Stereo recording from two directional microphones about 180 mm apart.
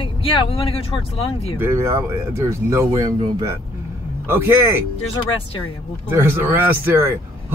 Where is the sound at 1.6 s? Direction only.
15° right (ahead or behind).